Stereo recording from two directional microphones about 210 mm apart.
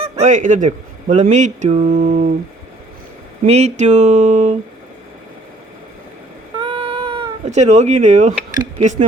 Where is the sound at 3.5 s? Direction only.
30° right (ahead or behind).